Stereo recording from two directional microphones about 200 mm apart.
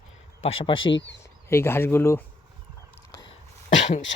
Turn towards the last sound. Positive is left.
turn(degrees=70)  # may be behind; listen again after turning